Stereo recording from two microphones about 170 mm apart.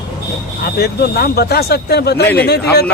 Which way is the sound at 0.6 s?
65° left (ahead or behind).